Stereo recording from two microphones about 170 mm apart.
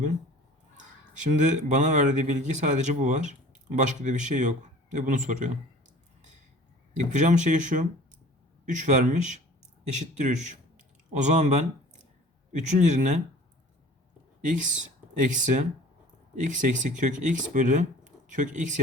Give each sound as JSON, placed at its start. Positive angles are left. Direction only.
{"t": 0.8, "sound": "speech", "side_deg": -45}
{"t": 6.9, "sound": "speech", "side_deg": -45}
{"t": 14.4, "sound": "speech", "side_deg": -45}